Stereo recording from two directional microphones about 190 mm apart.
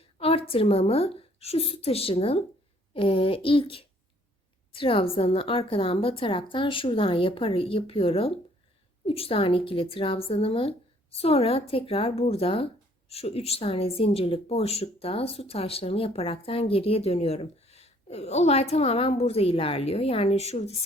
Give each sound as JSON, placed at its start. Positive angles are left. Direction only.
{"t": 0.0, "sound": "a woman's voice", "side_deg": 30}